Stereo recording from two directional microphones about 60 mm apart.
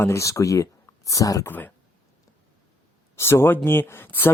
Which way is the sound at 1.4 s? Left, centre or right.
Left.